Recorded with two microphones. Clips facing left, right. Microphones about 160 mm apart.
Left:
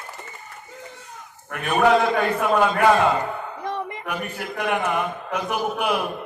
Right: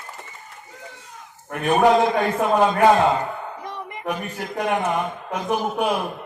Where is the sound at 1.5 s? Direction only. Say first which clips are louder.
Right 2 dB; 35° right (ahead or behind).